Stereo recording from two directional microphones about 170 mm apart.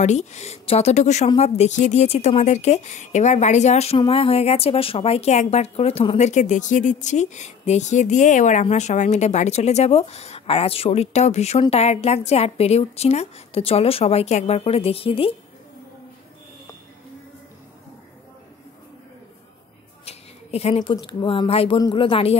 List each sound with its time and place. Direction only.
0.0 s a woman's voice: 40° left (ahead or behind)
20.1 s a sound: 35° left (ahead or behind)
20.9 s speech: 30° left (ahead or behind)